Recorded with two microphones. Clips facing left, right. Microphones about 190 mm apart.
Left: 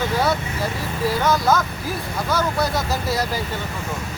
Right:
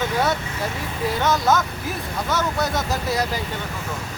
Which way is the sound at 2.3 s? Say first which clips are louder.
Left 2 dB; 20° right (ahead or behind).